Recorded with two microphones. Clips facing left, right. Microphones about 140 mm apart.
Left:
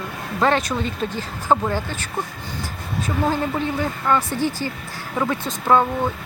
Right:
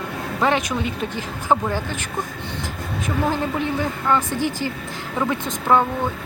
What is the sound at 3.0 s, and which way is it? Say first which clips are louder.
A woman's voice: even; 15° right (ahead or behind).